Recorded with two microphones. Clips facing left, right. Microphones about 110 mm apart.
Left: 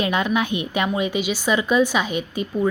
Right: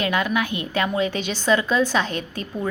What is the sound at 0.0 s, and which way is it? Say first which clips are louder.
A woman's voice: left 1 dB; 20° left (ahead or behind).